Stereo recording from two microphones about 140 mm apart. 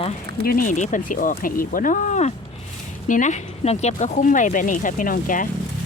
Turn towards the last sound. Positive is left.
turn(degrees=75)  # may be behind; listen again after turning